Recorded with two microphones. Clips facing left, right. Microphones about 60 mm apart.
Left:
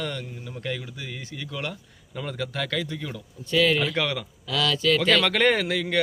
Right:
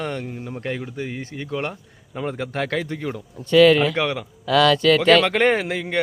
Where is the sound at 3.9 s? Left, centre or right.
Right.